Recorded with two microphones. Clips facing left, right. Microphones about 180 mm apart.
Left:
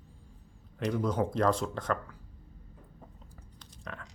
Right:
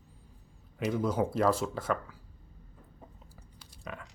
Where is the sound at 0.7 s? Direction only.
5° right (ahead or behind).